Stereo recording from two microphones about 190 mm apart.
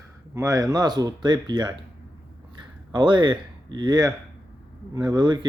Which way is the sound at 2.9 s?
25° right (ahead or behind).